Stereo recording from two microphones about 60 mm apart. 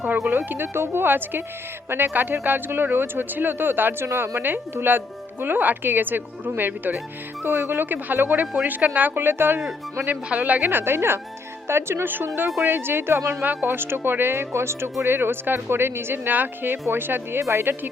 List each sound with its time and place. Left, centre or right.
0.3 s speech: right
4.0 s a woman's voice: right
4.4 s speech: right
9.1 s speech: right
10.2 s a woman's voice: right
13.4 s speech: right